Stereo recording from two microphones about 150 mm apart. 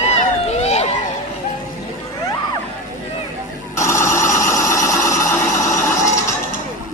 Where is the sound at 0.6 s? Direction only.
45° left (ahead or behind).